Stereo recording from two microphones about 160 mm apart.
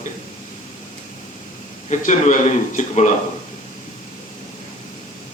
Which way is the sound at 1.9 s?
50° left (ahead or behind).